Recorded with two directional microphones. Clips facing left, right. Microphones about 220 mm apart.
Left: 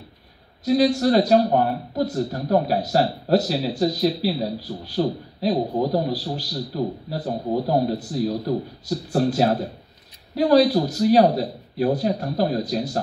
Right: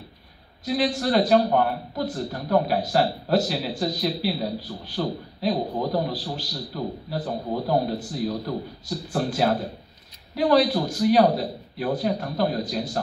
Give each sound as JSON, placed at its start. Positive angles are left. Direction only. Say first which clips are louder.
{"t": 0.7, "sound": "a man's voice", "louder": "left 6 dB", "side_deg": 40}